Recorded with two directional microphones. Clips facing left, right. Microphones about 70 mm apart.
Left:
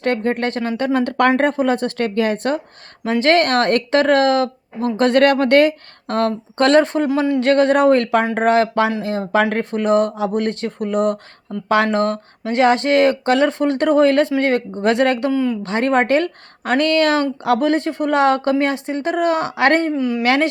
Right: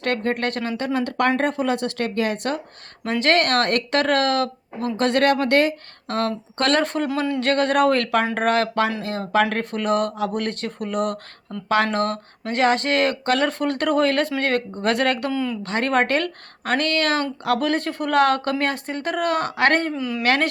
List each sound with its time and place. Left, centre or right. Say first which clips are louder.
0.0 s speech: left 4 dB; left
0.9 s speech: left 5 dB; left
11.5 s speech: left 5 dB; centre
11.9 s speech: left 4 dB; left
15.3 s speech: left 6 dB; centre
15.6 s speech: left 1 dB; left
19.9 s speech: left 6 dB; centre